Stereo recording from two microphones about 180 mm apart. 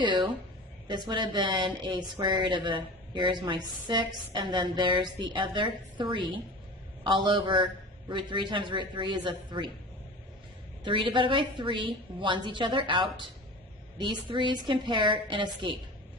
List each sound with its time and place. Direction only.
0.0 s a woman's voice: 25° right (ahead or behind)
10.8 s speech: 25° right (ahead or behind)